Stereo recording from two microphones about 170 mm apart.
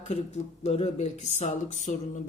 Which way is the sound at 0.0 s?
40° left (ahead or behind).